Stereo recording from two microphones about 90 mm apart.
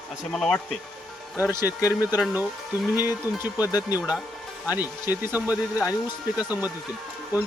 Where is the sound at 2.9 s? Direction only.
25° right (ahead or behind).